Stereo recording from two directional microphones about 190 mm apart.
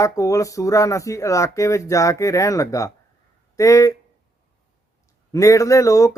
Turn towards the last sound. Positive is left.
turn(degrees=15)  # may be behind; listen again after turning